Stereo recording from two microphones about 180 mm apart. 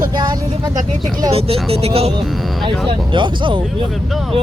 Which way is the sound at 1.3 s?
35° right (ahead or behind).